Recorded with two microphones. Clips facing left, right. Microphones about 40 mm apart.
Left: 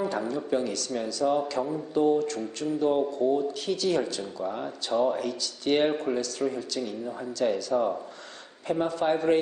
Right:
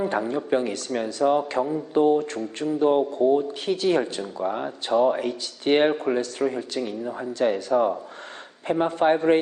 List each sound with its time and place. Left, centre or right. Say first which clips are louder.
0.1 s speech: right 4 dB; right